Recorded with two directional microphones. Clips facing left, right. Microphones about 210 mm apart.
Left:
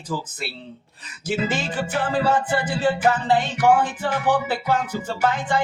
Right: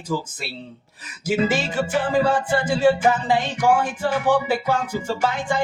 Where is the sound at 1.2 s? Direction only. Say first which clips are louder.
Right 4 dB; 10° right (ahead or behind).